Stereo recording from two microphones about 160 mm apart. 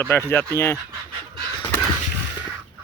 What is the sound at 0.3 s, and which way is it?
Speech, 15° left (ahead or behind).